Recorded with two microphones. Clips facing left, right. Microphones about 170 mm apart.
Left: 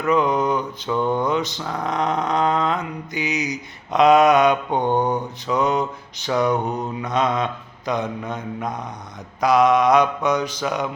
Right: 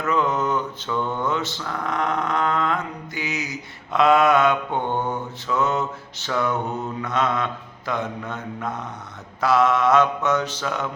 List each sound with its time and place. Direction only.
0.0 s mantra: 15° left (ahead or behind)